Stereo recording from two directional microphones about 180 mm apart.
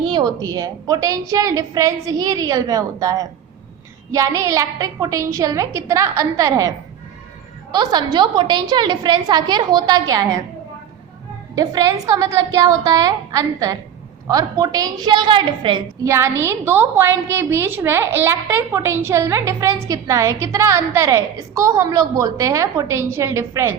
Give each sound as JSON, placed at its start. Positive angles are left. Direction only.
{"t": 0.0, "sound": "a woman's voice", "side_deg": -25}
{"t": 11.5, "sound": "a woman's voice", "side_deg": -20}
{"t": 16.0, "sound": "a woman's voice", "side_deg": -15}